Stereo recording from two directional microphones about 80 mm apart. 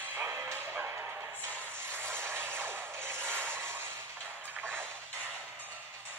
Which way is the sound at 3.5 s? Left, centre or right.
Right.